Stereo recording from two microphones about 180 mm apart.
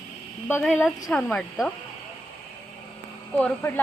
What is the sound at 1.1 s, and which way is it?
Speech, 5° left (ahead or behind).